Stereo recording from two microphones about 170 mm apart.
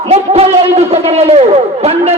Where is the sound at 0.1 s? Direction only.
35° right (ahead or behind).